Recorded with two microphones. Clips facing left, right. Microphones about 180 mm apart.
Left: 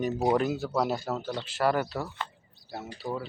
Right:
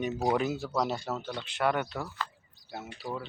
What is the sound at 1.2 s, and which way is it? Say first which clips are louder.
Speech: left 4 dB; 35° left (ahead or behind).